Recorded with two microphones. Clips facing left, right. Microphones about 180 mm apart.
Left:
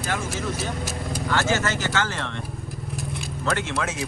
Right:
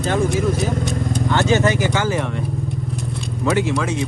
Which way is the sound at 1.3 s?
20° right (ahead or behind).